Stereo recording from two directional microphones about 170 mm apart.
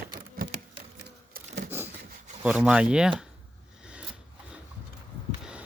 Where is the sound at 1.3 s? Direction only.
65° right (ahead or behind).